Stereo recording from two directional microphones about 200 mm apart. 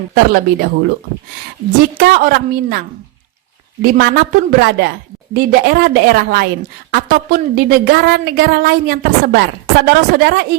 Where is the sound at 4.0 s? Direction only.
50° right (ahead or behind).